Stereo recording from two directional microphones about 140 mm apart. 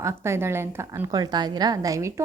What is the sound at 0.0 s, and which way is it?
A woman's voice, 20° right (ahead or behind).